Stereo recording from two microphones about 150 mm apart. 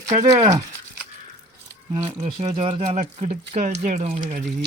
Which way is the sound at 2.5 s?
40° right (ahead or behind).